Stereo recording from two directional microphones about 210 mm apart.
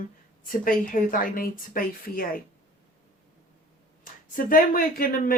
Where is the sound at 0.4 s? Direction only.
40° left (ahead or behind).